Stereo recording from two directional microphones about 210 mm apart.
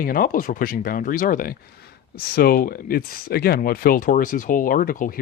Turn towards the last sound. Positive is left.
turn(degrees=40)  # may be behind; listen again after turning